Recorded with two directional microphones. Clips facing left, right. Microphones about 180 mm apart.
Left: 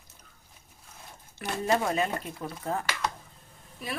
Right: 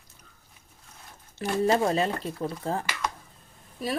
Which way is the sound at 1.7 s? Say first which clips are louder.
Right 1 dB; 30° right (ahead or behind).